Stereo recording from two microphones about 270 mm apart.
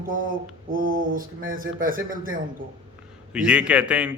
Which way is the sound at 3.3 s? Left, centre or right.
Centre.